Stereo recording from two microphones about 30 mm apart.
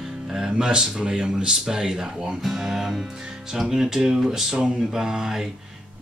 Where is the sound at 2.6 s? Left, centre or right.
Centre.